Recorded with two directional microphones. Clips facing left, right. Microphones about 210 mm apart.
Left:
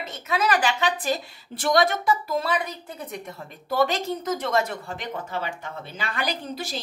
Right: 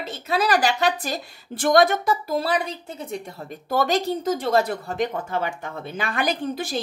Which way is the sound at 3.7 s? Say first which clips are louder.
Right 2 dB; 40° right (ahead or behind).